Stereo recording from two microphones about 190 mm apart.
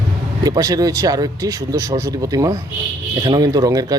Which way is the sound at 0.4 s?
20° right (ahead or behind).